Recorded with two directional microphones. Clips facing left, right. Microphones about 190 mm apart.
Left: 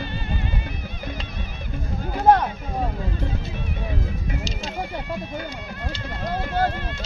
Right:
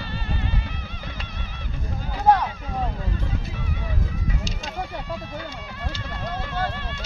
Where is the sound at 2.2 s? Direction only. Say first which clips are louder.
Left 2 dB; 50° left (ahead or behind).